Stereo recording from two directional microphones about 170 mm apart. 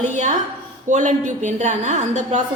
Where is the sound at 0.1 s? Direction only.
45° right (ahead or behind).